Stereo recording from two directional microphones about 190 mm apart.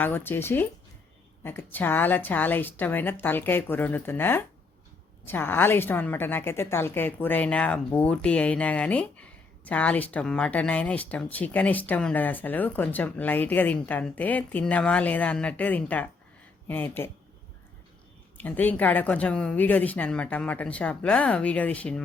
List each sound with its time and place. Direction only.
0.0 s a woman's voice: 10° left (ahead or behind)
18.3 s a woman's voice: 10° left (ahead or behind)